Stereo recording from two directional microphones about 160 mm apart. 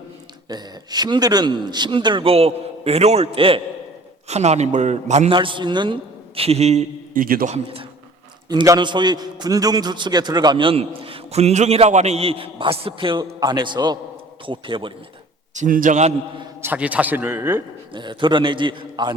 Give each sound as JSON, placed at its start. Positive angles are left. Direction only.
{"t": 0.4, "sound": "a man's voice", "side_deg": -25}
{"t": 5.3, "sound": "a man's voice", "side_deg": -30}
{"t": 7.1, "sound": "a man's voice", "side_deg": -60}
{"t": 7.5, "sound": "a man's voice", "side_deg": -35}
{"t": 8.4, "sound": "a man's voice", "side_deg": -25}
{"t": 15.5, "sound": "a man's voice", "side_deg": -55}
{"t": 16.6, "sound": "a man's voice", "side_deg": -10}
{"t": 17.9, "sound": "a man's voice", "side_deg": -30}